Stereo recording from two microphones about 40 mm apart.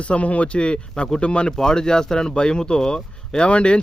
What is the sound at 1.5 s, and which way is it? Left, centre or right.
Speech, centre.